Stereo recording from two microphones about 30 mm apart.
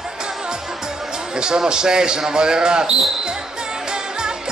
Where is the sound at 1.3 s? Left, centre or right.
Right.